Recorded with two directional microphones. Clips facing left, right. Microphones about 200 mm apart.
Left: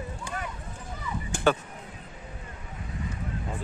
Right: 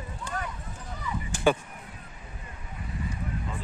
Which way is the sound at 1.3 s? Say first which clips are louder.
Even; 55° left (ahead or behind).